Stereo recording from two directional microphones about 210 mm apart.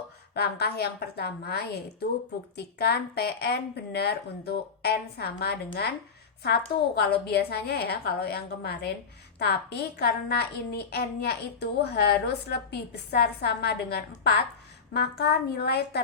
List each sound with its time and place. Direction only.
0.3 s a woman's voice: 50° left (ahead or behind)
6.9 s a woman's voice: 50° left (ahead or behind)